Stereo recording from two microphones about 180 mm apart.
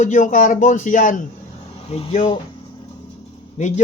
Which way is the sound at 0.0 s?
45° left (ahead or behind).